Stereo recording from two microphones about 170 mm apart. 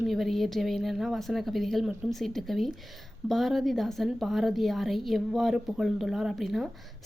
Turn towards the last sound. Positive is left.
turn(degrees=0)  # may be behind; listen again after turning